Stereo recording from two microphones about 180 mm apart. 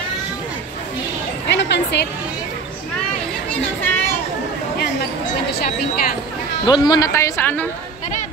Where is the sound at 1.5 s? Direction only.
70° left (ahead or behind).